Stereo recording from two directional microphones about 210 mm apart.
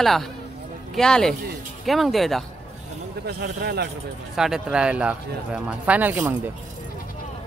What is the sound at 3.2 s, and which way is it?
Speech, 50° right (ahead or behind).